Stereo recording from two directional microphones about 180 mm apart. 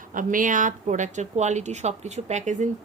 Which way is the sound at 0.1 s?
45° right (ahead or behind).